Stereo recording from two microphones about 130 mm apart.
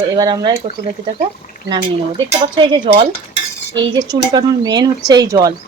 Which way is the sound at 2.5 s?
40° right (ahead or behind).